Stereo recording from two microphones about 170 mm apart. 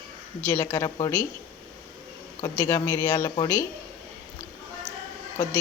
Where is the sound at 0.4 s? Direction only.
15° left (ahead or behind).